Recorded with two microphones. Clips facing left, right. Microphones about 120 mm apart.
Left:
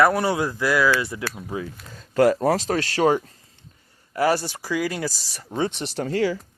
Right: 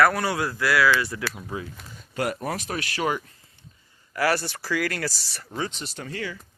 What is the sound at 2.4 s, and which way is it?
Speech, 30° left (ahead or behind).